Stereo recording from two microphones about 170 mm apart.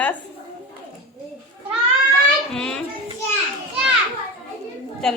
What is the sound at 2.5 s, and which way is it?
Speech, 5° left (ahead or behind).